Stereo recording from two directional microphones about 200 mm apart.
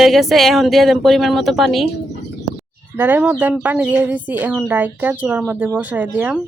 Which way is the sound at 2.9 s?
10° right (ahead or behind).